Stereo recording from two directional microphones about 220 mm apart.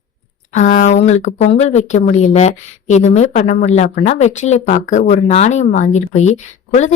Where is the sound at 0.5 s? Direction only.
35° left (ahead or behind).